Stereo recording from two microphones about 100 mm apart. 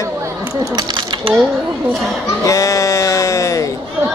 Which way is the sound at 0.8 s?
45° right (ahead or behind).